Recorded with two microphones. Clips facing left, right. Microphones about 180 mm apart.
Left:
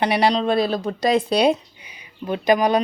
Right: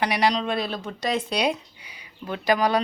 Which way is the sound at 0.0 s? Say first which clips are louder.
Left 4 dB; 30° left (ahead or behind).